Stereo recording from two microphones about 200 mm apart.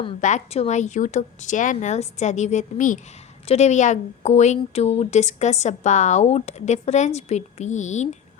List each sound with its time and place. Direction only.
0.2 s a woman's voice: 35° left (ahead or behind)